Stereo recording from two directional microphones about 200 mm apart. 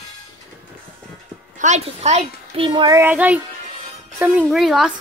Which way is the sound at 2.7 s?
20° right (ahead or behind).